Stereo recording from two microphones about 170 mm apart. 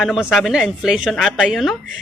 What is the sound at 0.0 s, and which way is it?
Speech, 5° right (ahead or behind).